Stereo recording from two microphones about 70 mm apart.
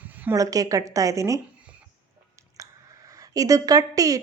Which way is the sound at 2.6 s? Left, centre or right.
Right.